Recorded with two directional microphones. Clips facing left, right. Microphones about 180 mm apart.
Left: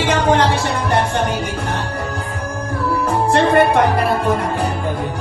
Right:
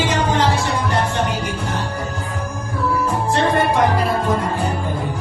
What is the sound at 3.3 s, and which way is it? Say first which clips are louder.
Music: left 5 dB; 65° left (ahead or behind).